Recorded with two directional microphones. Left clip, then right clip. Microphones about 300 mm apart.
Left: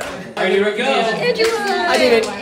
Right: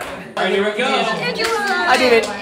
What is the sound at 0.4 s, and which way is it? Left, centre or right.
Speech, centre.